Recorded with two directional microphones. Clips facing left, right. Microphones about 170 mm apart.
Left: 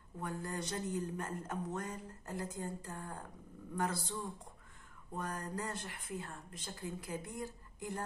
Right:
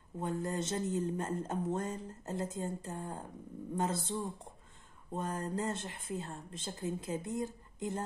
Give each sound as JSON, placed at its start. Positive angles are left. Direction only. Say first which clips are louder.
{"t": 0.2, "sound": "speech", "louder": "right 5 dB", "side_deg": -25}